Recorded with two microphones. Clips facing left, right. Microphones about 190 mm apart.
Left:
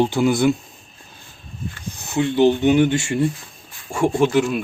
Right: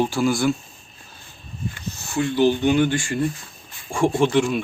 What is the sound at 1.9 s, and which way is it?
Speech, 20° left (ahead or behind).